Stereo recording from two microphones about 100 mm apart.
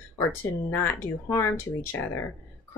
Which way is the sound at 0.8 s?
25° left (ahead or behind).